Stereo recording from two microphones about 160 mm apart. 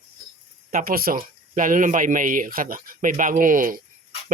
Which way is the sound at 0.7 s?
65° right (ahead or behind).